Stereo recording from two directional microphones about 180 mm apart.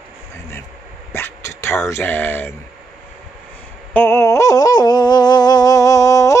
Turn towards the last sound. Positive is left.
turn(degrees=15)  # may be behind; listen again after turning